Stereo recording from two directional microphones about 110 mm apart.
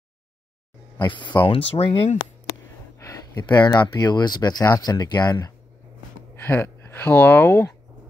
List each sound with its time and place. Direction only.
0.9 s speech: 45° left (ahead or behind)
1.5 s speech: 60° left (ahead or behind)
2.4 s a sound: 30° left (ahead or behind)
3.5 s speech: 40° left (ahead or behind)
6.3 s speech: 20° left (ahead or behind)